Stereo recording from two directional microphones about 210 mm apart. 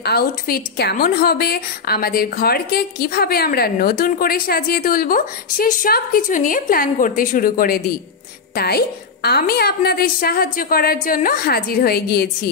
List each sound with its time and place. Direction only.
0.0 s a woman's voice: 50° left (ahead or behind)